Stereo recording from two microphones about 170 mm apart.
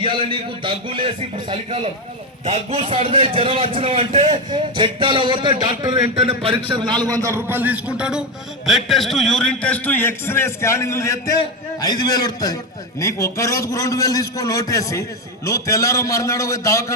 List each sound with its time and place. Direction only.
0.0 s a man's voice: 30° right (ahead or behind); by 16.8 s 20° left (ahead or behind)